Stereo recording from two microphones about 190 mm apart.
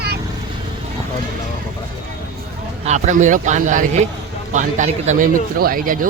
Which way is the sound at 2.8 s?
40° right (ahead or behind).